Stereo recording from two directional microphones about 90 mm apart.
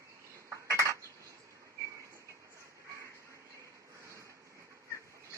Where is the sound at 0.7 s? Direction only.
35° right (ahead or behind).